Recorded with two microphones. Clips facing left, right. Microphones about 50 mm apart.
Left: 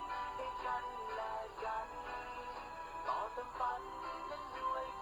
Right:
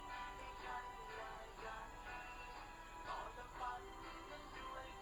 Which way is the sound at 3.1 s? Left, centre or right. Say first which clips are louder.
Left 10 dB; left.